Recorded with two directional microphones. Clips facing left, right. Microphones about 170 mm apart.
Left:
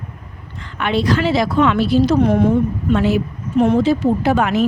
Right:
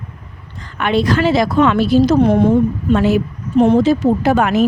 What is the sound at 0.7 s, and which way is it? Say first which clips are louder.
Speech: right 2 dB; 50° right (ahead or behind).